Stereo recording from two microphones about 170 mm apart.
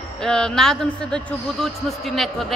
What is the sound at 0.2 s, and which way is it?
A man's voice, 5° left (ahead or behind).